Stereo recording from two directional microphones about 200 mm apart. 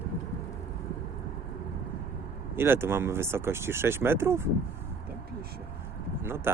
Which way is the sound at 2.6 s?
10° right (ahead or behind).